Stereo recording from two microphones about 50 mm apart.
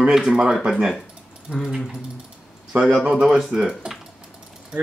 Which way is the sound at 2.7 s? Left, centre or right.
Right.